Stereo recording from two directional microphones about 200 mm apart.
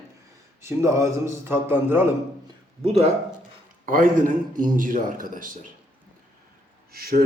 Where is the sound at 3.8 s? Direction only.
40° right (ahead or behind).